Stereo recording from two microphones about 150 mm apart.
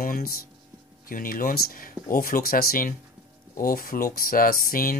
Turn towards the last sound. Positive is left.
turn(degrees=70)  # may be behind; listen again after turning